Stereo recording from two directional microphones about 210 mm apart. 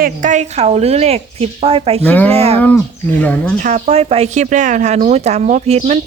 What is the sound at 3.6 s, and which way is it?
Speech, 35° right (ahead or behind).